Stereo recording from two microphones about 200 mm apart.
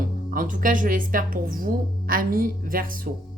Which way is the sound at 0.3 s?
40° right (ahead or behind).